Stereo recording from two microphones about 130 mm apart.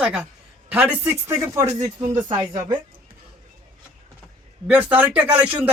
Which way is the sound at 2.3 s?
35° right (ahead or behind).